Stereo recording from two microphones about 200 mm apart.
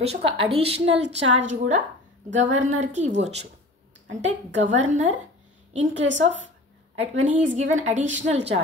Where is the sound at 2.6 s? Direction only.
35° right (ahead or behind).